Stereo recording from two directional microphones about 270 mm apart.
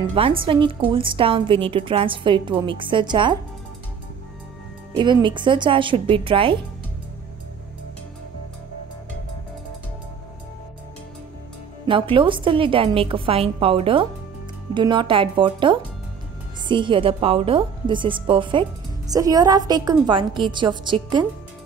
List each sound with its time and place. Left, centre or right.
0.1 s a woman's voice: centre
4.9 s a woman's voice: centre
11.9 s a woman's voice: centre